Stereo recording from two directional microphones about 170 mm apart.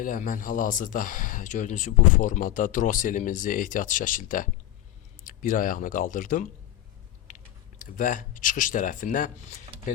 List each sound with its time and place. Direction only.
0.0 s speech: 55° left (ahead or behind)
7.9 s speech: 50° left (ahead or behind)